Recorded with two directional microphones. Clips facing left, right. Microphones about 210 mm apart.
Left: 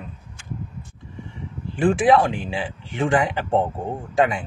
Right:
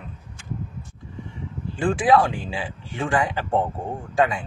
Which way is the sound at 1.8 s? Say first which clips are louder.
Left 2 dB; 25° left (ahead or behind).